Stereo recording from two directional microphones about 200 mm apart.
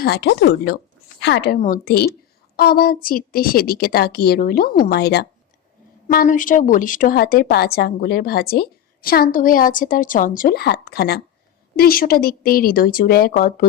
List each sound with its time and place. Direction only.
0.0 s a woman's voice: 60° left (ahead or behind)
1.5 s a woman's voice: 40° left (ahead or behind)
6.1 s a woman's voice: 40° left (ahead or behind)